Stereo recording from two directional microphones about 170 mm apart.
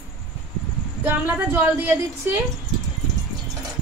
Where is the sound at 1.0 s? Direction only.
10° right (ahead or behind).